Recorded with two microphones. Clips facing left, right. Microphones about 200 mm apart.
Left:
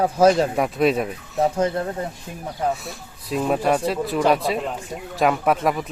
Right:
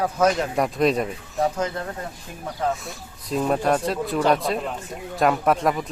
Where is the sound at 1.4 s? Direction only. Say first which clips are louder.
Left 4 dB; 30° left (ahead or behind).